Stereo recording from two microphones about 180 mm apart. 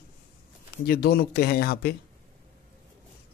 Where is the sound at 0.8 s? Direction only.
60° left (ahead or behind).